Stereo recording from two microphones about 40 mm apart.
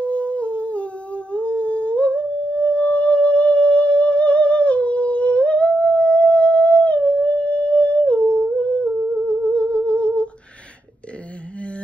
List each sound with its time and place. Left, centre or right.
0.0 s humming: left